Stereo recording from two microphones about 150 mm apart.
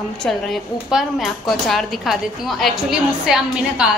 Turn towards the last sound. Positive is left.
turn(degrees=-5)  # may be behind; listen again after turning